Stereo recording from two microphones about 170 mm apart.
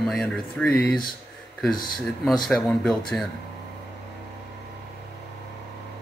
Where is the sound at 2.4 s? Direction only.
5° left (ahead or behind).